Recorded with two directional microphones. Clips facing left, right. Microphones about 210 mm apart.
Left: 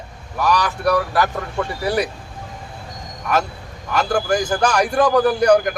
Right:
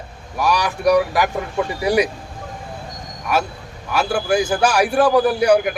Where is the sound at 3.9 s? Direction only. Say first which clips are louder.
Right 1 dB; 10° right (ahead or behind).